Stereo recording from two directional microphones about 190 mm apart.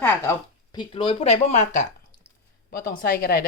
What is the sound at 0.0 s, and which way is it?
Speech, 10° left (ahead or behind).